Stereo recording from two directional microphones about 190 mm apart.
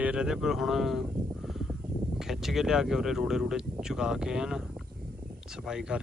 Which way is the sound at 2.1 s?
Centre (ahead or behind).